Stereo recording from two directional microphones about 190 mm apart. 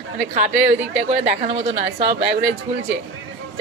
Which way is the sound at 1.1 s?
35° right (ahead or behind).